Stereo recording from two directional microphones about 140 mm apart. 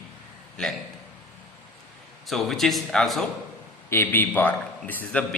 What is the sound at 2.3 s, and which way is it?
A man's voice, centre (ahead or behind).